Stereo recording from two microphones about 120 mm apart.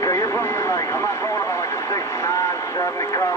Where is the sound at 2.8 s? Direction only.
25° left (ahead or behind).